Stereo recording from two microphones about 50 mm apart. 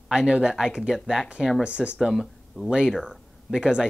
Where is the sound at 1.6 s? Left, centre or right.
Right.